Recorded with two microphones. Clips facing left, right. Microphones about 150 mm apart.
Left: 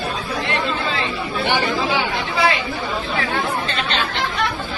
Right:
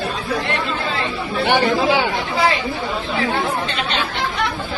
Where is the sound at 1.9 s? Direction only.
35° right (ahead or behind).